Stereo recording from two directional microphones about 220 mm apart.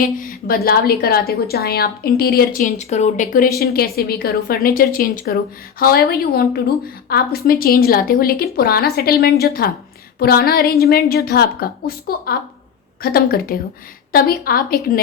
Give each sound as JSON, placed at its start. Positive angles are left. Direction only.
{"t": 0.2, "sound": "a woman's voice", "side_deg": 40}